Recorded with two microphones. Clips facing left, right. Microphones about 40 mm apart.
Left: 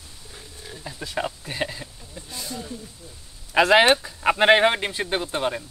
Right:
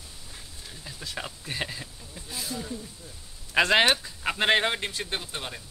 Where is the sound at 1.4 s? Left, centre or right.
Centre.